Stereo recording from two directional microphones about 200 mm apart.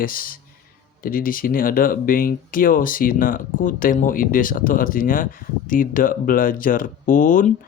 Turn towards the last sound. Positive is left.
turn(degrees=40)  # may be behind; listen again after turning